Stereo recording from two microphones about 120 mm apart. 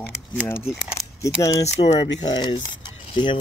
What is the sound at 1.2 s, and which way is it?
Speech, 30° left (ahead or behind).